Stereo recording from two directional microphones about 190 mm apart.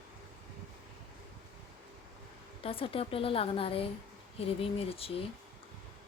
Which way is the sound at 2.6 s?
30° left (ahead or behind).